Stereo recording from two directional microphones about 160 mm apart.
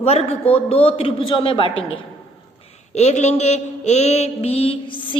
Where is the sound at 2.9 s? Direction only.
45° left (ahead or behind).